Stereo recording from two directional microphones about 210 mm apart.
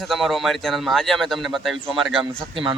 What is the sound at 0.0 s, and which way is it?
Speech, centre (ahead or behind).